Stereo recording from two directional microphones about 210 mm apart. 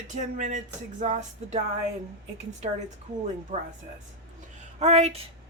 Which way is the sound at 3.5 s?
30° right (ahead or behind).